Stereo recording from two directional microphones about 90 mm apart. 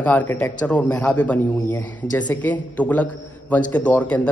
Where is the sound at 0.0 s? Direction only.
20° left (ahead or behind).